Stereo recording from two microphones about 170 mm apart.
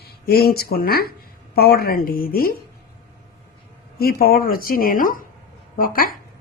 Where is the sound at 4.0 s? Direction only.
60° left (ahead or behind).